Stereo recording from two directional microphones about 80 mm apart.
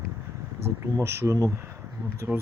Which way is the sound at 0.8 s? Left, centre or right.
Right.